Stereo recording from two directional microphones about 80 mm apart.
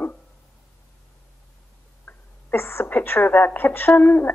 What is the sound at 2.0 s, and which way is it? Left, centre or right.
Speech, left.